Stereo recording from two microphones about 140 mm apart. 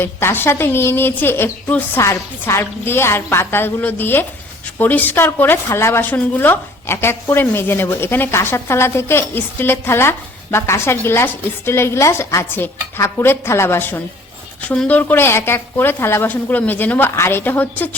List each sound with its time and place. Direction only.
0.0 s speech: 15° left (ahead or behind)